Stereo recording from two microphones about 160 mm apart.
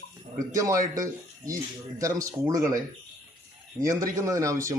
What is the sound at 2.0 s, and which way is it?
Speech, 20° right (ahead or behind).